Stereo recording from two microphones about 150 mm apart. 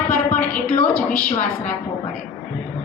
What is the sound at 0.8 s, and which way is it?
Speech, 5° left (ahead or behind).